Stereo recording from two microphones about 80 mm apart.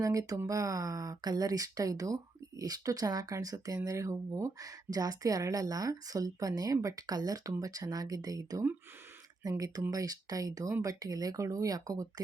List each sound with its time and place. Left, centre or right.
0.0 s speech: right